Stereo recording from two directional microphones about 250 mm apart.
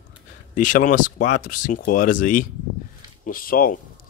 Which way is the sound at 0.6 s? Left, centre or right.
Left.